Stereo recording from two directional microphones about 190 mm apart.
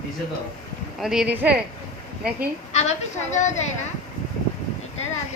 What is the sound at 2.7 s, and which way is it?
Speech, 35° left (ahead or behind).